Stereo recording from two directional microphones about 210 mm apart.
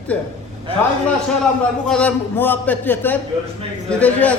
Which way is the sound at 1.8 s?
5° left (ahead or behind).